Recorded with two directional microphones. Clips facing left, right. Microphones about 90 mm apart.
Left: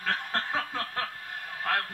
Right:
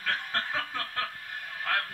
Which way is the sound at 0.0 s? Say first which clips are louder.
Left 1 dB; 25° left (ahead or behind).